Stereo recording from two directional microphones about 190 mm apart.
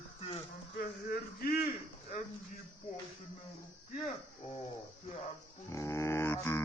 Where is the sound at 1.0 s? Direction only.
55° left (ahead or behind).